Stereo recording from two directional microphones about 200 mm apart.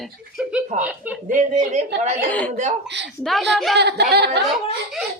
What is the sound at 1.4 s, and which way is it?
A woman's voice, 35° right (ahead or behind).